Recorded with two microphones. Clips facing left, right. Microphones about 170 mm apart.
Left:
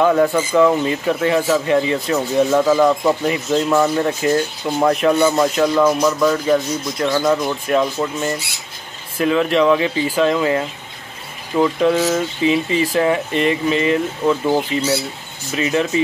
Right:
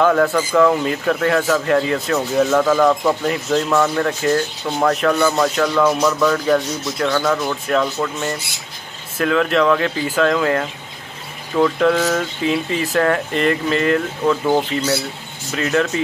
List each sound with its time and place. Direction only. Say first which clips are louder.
0.0 s speech: left 1 dB; 10° left (ahead or behind)
9.2 s speech: left 1 dB; 10° left (ahead or behind)